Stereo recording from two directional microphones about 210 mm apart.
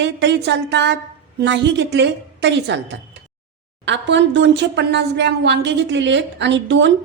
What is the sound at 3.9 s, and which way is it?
Speech, 60° right (ahead or behind).